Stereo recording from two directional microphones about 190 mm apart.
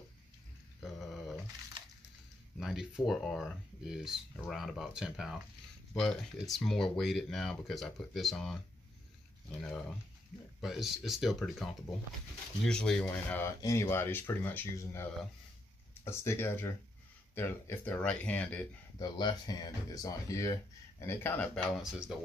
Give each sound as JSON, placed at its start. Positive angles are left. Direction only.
{"t": 0.8, "sound": "a sound", "side_deg": 0}
{"t": 2.6, "sound": "speech", "side_deg": 0}
{"t": 18.9, "sound": "speech", "side_deg": 20}